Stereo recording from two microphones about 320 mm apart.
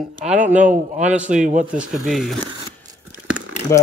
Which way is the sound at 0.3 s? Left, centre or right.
Centre.